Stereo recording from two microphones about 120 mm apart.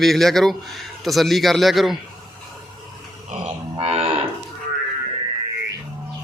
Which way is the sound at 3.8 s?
55° right (ahead or behind).